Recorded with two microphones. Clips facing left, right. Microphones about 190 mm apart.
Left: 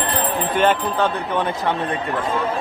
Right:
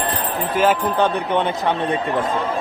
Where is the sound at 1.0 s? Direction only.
20° right (ahead or behind).